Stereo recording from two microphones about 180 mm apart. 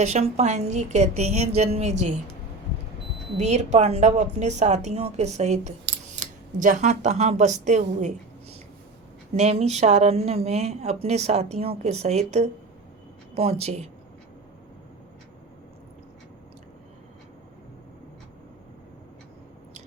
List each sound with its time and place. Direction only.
0.0 s a woman's voice: 40° right (ahead or behind)
3.3 s a woman's voice: 40° right (ahead or behind)